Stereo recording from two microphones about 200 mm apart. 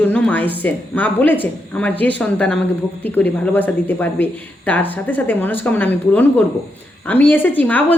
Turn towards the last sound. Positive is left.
turn(degrees=10)  # may be behind; listen again after turning